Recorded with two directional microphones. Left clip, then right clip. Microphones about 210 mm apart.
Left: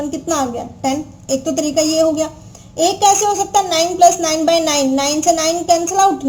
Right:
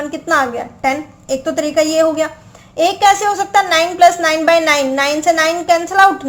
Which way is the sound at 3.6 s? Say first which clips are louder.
Right 2 dB; 10° right (ahead or behind).